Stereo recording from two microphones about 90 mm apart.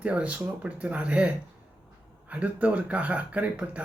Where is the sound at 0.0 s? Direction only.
15° right (ahead or behind).